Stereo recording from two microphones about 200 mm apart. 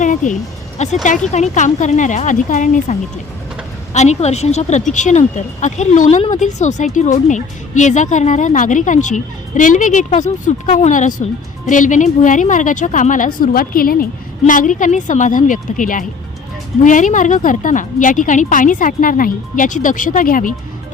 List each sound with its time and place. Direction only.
0.0 s a woman's voice: 40° left (ahead or behind)